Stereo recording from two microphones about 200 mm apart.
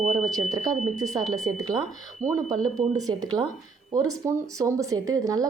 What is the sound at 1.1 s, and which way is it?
Speech, 20° right (ahead or behind).